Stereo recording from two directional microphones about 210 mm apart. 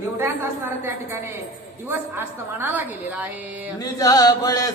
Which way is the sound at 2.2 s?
10° right (ahead or behind).